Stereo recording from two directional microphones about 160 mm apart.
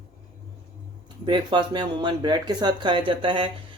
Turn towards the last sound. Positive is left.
turn(degrees=-35)  # may be behind; listen again after turning